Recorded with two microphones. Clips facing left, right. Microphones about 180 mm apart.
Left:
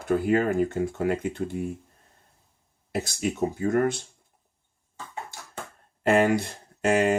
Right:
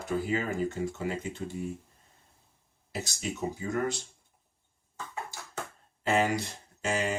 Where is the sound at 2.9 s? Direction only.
55° left (ahead or behind).